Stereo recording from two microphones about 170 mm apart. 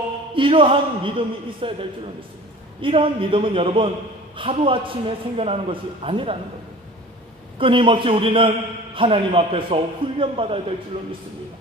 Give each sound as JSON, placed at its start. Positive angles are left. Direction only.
{"t": 0.3, "sound": "a man's voice", "side_deg": -30}
{"t": 7.6, "sound": "a man's voice", "side_deg": -30}